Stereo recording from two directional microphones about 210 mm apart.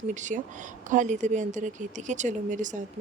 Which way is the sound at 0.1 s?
35° right (ahead or behind).